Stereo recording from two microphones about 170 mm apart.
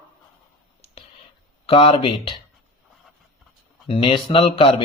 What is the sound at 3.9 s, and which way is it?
Speech, 30° left (ahead or behind).